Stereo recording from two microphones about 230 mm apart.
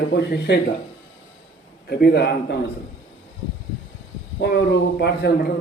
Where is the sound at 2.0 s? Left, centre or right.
Left.